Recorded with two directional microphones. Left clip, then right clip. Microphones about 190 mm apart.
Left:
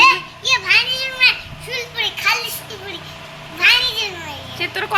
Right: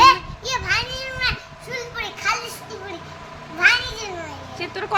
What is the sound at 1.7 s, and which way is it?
Children playing, 20° right (ahead or behind).